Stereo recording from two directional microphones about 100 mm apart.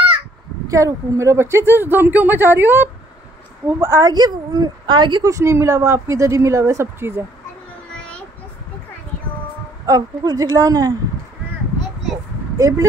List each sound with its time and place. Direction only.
0.7 s a woman's voice: 35° right (ahead or behind)
3.8 s a woman's voice: 35° right (ahead or behind)
5.2 s a woman's voice: 30° right (ahead or behind)
9.8 s a woman's voice: 35° right (ahead or behind)
12.5 s speech: 35° right (ahead or behind)